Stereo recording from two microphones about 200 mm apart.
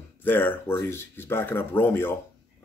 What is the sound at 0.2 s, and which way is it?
Speech, 10° left (ahead or behind).